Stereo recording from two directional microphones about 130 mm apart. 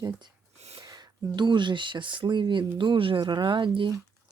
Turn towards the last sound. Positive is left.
turn(degrees=-35)  # may be behind; listen again after turning